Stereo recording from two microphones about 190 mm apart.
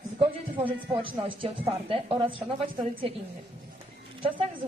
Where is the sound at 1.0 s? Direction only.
30° right (ahead or behind).